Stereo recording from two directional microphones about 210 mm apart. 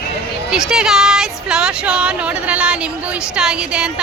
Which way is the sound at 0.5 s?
Centre (ahead or behind).